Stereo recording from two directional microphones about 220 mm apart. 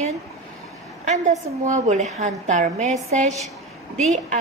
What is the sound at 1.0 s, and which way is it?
A woman's voice, 30° right (ahead or behind).